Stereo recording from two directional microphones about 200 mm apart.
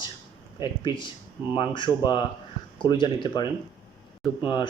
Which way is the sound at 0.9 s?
20° left (ahead or behind).